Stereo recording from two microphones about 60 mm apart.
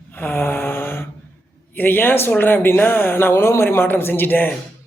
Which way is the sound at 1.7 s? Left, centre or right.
Left.